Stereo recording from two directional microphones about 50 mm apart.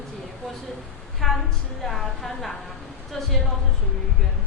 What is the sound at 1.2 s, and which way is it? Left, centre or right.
A woman's voice, centre.